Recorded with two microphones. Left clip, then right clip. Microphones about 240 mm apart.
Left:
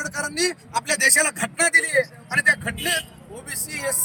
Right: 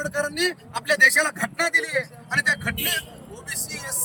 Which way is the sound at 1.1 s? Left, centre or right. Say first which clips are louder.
Left 1 dB; left.